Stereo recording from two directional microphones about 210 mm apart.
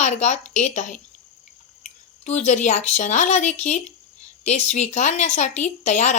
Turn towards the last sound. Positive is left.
turn(degrees=35)  # may be behind; listen again after turning